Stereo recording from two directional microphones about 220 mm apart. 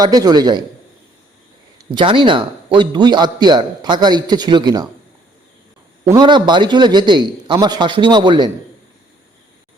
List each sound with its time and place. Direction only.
0.0 s a man's voice: 15° right (ahead or behind)
1.9 s a man's voice: 20° right (ahead or behind)
6.1 s a man's voice: 20° right (ahead or behind)